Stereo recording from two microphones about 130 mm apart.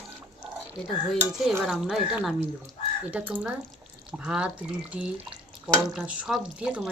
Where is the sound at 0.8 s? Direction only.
10° left (ahead or behind).